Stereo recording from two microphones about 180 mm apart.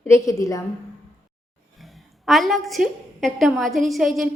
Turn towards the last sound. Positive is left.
turn(degrees=0)  # may be behind; listen again after turning